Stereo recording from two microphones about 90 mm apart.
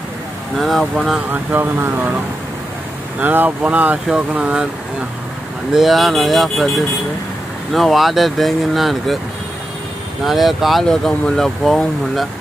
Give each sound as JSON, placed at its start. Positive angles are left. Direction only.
{"t": 0.6, "sound": "speech", "side_deg": 0}
{"t": 1.3, "sound": "speech", "side_deg": -25}
{"t": 3.2, "sound": "speech", "side_deg": -20}
{"t": 5.7, "sound": "speech", "side_deg": -5}
{"t": 10.2, "sound": "speech", "side_deg": 0}